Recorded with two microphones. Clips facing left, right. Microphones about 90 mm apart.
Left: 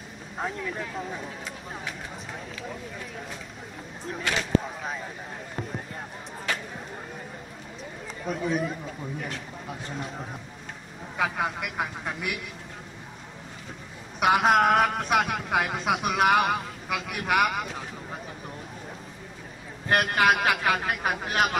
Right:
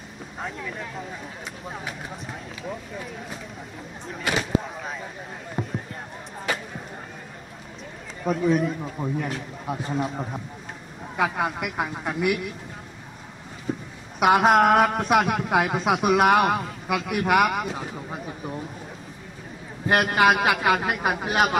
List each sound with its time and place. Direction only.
0.4 s a man's voice: centre (ahead or behind)
4.0 s a man's voice: 5° right (ahead or behind)
5.6 s speech: 10° right (ahead or behind)
6.5 s music: 10° right (ahead or behind)
8.3 s a man's voice: centre (ahead or behind)
9.0 s a man's voice: 40° right (ahead or behind)
9.8 s a man's voice: 5° right (ahead or behind)
13.7 s a sound: 5° right (ahead or behind)
14.2 s a man's voice: 5° right (ahead or behind)
19.9 s a man's voice: 5° right (ahead or behind)